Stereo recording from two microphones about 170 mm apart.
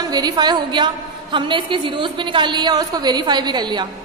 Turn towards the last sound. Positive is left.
turn(degrees=-25)  # may be behind; listen again after turning